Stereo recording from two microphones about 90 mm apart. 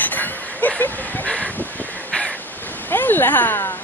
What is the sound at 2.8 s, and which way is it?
Speech, 20° left (ahead or behind).